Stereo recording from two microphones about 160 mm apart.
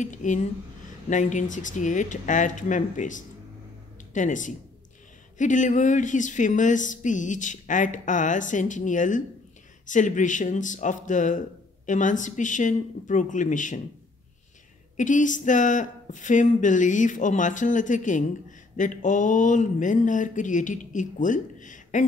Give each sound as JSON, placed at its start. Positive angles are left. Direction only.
{"t": 0.0, "sound": "speech", "side_deg": 50}
{"t": 15.0, "sound": "speech", "side_deg": 50}